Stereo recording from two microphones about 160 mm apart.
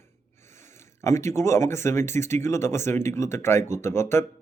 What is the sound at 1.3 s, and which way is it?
Speech, 15° left (ahead or behind).